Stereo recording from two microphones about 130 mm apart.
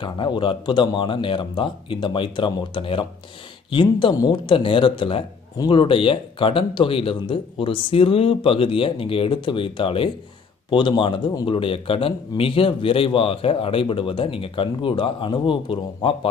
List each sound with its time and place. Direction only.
0.0 s a man's voice: 40° left (ahead or behind)